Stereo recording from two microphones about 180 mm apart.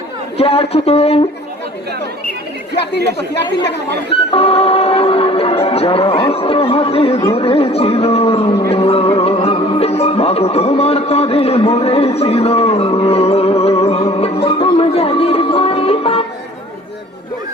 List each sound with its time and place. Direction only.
0.3 s speech: 35° left (ahead or behind)
4.3 s speech: 35° left (ahead or behind)
8.7 s music: 35° left (ahead or behind)